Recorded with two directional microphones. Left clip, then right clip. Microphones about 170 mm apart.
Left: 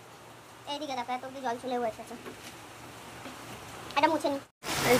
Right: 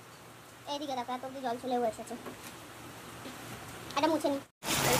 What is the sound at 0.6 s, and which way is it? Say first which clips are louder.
A woman's voice: left 1 dB; centre (ahead or behind).